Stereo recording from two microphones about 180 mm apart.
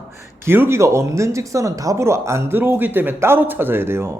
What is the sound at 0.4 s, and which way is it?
Speech, 10° right (ahead or behind).